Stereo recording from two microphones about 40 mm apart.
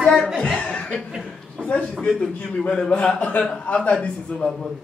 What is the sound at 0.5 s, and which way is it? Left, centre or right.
Speech, left.